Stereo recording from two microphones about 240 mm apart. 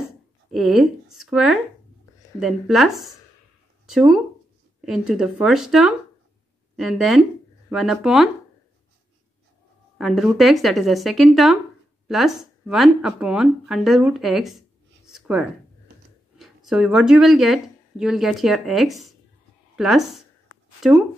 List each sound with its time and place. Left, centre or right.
0.5 s speech: centre
9.9 s speech: centre
15.0 s a sound: centre
16.3 s a woman's voice: centre